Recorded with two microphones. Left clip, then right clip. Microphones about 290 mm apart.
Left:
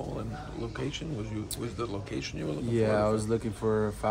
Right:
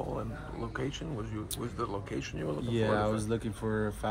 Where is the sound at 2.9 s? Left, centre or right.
Centre.